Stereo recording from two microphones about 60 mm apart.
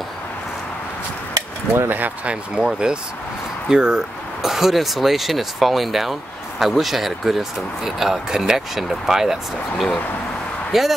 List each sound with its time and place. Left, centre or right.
1.9 s speech: right
2.5 s speech: centre